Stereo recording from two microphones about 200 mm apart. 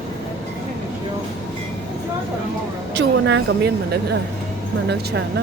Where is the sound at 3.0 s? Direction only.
60° right (ahead or behind).